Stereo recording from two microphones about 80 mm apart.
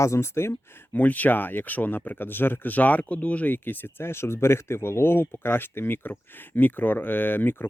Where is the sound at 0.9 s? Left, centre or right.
Centre.